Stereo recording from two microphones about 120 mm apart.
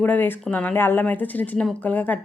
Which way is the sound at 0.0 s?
15° left (ahead or behind).